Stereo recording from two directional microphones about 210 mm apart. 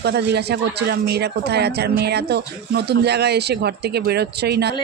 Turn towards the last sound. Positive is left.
turn(degrees=-50)  # may be behind; listen again after turning